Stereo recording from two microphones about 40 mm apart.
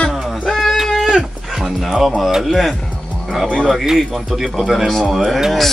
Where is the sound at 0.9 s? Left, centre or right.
Centre.